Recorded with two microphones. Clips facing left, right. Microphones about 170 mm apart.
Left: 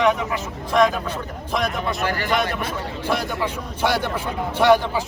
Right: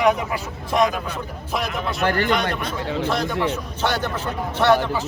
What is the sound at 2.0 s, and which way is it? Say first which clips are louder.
Speech: right 7 dB; 55° right (ahead or behind).